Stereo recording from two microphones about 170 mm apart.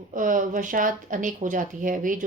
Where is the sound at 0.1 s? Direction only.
50° right (ahead or behind).